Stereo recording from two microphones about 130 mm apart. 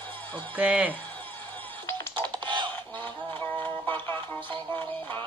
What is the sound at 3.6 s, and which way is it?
Music, 15° left (ahead or behind).